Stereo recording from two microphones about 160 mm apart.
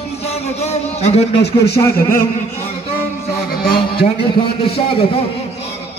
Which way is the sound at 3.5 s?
75° left (ahead or behind).